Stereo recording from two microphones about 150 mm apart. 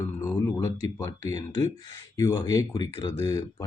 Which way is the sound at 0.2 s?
20° left (ahead or behind).